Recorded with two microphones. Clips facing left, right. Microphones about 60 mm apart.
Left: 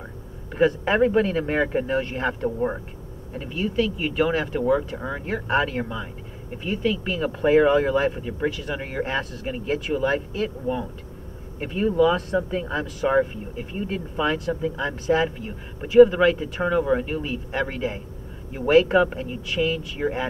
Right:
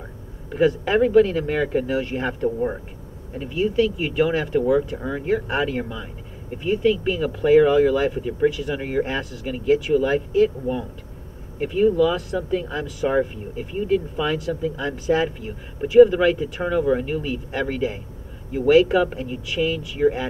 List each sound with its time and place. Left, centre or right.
0.5 s speech: centre
1.9 s speech: centre
3.5 s speech: centre
5.2 s speech: centre
7.2 s speech: centre
9.9 s speech: centre
11.6 s a man's voice: centre